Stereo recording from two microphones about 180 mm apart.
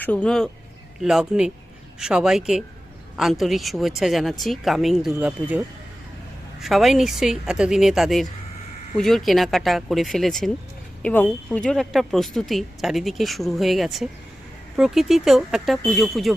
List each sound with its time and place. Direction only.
0.0 s speech: 10° left (ahead or behind)